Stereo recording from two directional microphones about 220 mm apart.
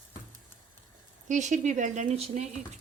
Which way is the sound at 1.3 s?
35° right (ahead or behind).